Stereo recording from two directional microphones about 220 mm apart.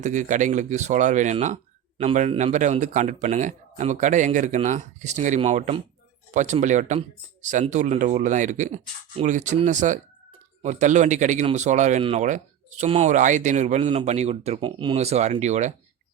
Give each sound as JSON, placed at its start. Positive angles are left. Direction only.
{"t": 0.0, "sound": "speech", "side_deg": -35}